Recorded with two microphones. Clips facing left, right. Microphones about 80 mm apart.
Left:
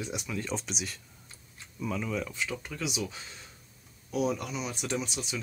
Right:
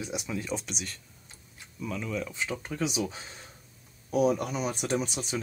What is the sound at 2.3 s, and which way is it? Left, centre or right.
Speech, right.